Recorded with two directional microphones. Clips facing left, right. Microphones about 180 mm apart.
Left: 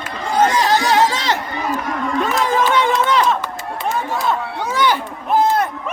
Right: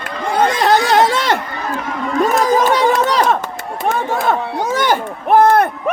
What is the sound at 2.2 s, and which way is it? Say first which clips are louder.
Run: right 5 dB; 40° right (ahead or behind).